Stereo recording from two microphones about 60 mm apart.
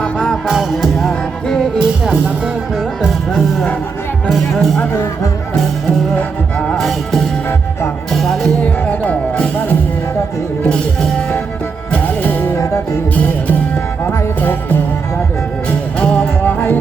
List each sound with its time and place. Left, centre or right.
0.0 s music: centre
0.4 s music: centre
4.5 s speech: centre
6.7 s music: centre
8.6 s music: left
11.9 s music: left
16.0 s music: centre
16.4 s music: left